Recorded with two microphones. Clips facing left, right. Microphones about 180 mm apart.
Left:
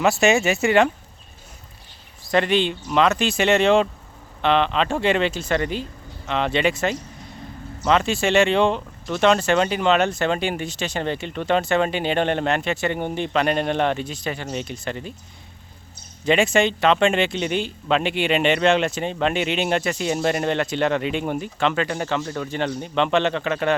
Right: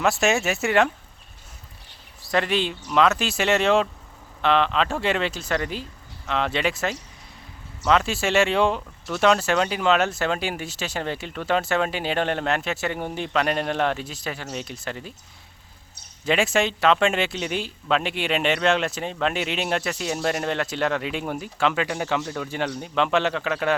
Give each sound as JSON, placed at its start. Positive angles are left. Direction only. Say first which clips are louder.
{"t": 0.0, "sound": "speech", "louder": "left 4 dB", "side_deg": 0}
{"t": 2.3, "sound": "speech", "louder": "left 4 dB", "side_deg": 0}
{"t": 16.2, "sound": "speech", "louder": "left 3 dB", "side_deg": 0}